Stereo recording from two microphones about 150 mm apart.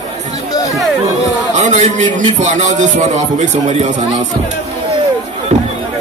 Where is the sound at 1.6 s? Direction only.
55° right (ahead or behind).